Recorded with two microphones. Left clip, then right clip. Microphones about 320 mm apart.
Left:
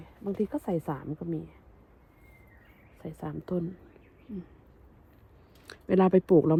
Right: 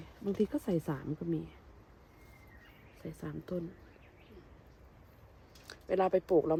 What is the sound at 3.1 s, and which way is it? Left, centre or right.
Speech, centre.